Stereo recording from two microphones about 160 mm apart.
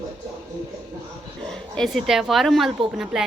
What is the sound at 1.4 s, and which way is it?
A woman's voice, 5° left (ahead or behind).